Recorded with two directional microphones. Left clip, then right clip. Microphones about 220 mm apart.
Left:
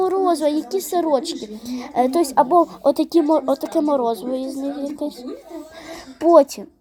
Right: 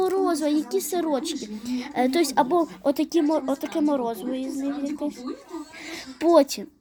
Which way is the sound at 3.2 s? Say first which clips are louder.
Left 6 dB; 25° left (ahead or behind).